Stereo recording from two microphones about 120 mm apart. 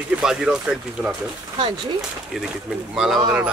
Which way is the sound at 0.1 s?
5° right (ahead or behind).